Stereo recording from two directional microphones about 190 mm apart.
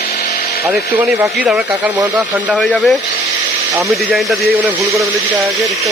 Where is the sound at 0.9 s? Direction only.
10° right (ahead or behind).